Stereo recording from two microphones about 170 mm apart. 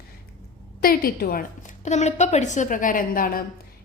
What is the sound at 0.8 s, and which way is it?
A woman's voice, 60° left (ahead or behind).